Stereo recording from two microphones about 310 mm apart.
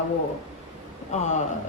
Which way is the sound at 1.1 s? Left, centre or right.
Left.